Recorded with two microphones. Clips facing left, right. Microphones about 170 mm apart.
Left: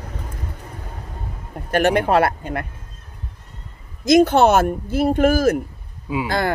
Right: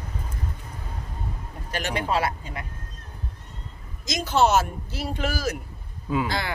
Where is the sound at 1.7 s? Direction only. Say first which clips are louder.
Left 10 dB; 55° left (ahead or behind).